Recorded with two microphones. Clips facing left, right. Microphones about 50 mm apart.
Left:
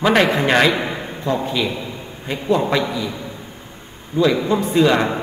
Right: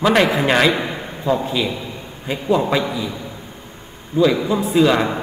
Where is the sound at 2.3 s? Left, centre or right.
Centre.